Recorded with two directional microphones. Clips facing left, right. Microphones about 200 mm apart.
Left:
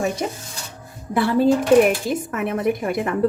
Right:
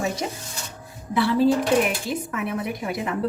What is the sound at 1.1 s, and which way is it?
Speech, 50° left (ahead or behind).